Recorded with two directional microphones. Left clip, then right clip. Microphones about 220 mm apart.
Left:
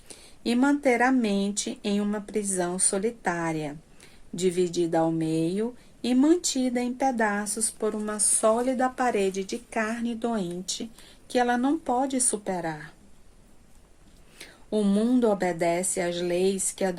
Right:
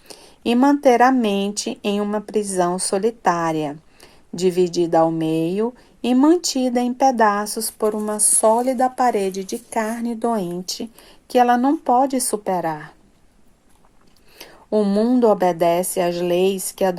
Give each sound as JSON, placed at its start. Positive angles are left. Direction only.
{"t": 0.1, "sound": "speech", "side_deg": -30}
{"t": 14.3, "sound": "speech", "side_deg": -25}